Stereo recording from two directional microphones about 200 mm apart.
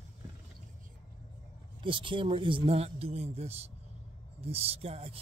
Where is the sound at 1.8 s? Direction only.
25° right (ahead or behind).